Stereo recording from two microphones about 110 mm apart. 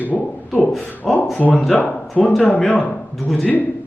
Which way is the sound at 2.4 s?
10° left (ahead or behind).